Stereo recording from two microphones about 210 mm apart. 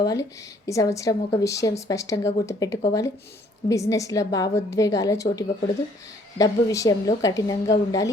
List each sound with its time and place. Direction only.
0.0 s a woman's voice: 15° left (ahead or behind)